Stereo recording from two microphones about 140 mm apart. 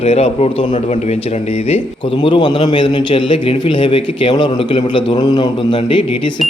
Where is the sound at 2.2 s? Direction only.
35° left (ahead or behind).